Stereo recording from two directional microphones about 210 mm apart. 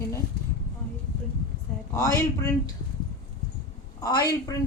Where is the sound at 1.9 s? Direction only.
15° left (ahead or behind).